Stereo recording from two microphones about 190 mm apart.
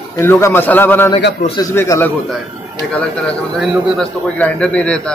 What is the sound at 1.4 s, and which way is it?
Speech, 25° left (ahead or behind).